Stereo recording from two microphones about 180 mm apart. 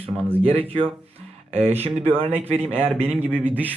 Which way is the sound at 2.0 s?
30° right (ahead or behind).